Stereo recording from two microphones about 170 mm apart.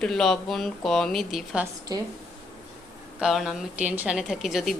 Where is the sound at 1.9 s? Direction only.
25° right (ahead or behind).